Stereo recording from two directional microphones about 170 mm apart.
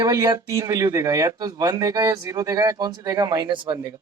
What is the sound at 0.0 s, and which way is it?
Speech, 20° right (ahead or behind).